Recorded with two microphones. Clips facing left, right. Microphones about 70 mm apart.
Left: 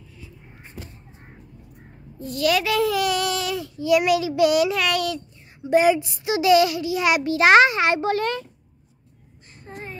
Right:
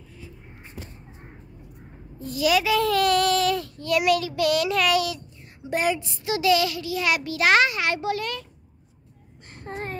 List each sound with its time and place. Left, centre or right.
2.1 s a child's voice: centre
2.8 s a sound: centre
4.1 s a child's voice: centre
4.6 s a child's voice: centre
5.7 s a child's voice: centre; by 8.5 s left
9.5 s child singing: right